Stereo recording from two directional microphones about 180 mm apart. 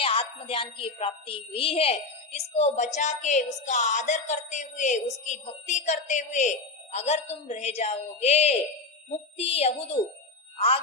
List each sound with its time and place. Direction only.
0.0 s a woman's voice: 30° left (ahead or behind)